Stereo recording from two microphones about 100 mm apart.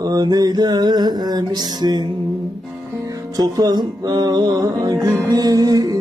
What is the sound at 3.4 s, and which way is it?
Music, 40° right (ahead or behind).